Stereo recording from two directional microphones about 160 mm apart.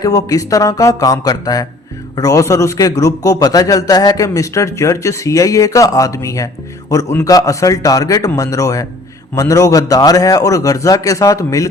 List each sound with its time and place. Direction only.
0.0 s a man's voice: 20° left (ahead or behind)